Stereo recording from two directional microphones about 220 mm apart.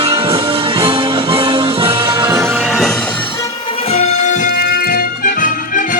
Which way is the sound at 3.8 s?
25° left (ahead or behind).